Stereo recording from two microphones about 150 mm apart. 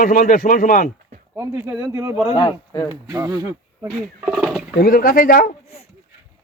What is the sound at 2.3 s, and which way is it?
Speech, 25° left (ahead or behind).